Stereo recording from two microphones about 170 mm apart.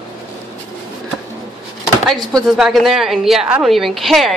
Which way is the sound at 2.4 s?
Centre (ahead or behind).